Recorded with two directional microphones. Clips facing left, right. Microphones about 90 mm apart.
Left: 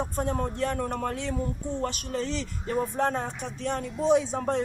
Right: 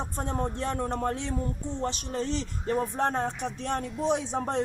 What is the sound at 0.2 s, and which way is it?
A woman's voice, 25° right (ahead or behind).